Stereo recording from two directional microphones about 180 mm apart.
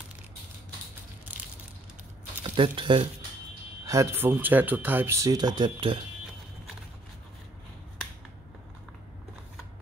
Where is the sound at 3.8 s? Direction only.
15° right (ahead or behind).